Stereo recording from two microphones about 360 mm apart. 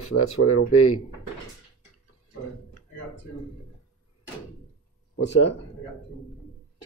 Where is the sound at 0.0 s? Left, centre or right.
Left.